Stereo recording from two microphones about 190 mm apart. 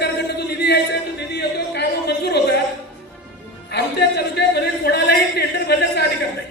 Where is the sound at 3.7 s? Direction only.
60° left (ahead or behind).